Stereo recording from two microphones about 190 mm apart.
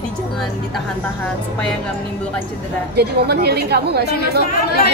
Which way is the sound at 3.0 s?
55° right (ahead or behind).